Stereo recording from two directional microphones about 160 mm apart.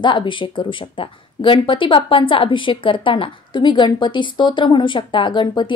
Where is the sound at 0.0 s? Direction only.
30° left (ahead or behind).